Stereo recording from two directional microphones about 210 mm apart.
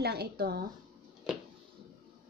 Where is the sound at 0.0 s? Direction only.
50° right (ahead or behind).